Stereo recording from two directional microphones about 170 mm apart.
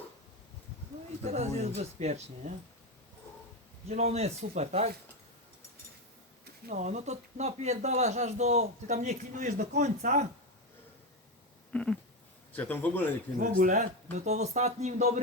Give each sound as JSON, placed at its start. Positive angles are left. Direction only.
{"t": 1.2, "sound": "speech", "side_deg": -40}
{"t": 3.8, "sound": "speech", "side_deg": -40}
{"t": 6.7, "sound": "speech", "side_deg": -45}
{"t": 11.7, "sound": "a sound", "side_deg": 5}
{"t": 12.5, "sound": "a man's voice", "side_deg": 10}
{"t": 13.4, "sound": "speech", "side_deg": -55}